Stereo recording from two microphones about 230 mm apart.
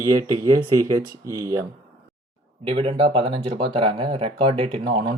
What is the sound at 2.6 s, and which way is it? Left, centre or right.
Speech, right.